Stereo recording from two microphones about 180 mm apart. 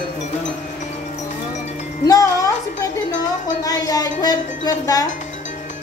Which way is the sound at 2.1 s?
15° left (ahead or behind).